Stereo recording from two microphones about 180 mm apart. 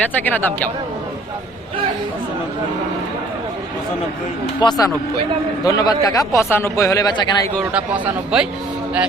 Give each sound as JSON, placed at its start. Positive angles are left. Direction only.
{"t": 0.1, "sound": "speech", "side_deg": 10}
{"t": 4.6, "sound": "speech", "side_deg": 20}
{"t": 7.7, "sound": "speech", "side_deg": -5}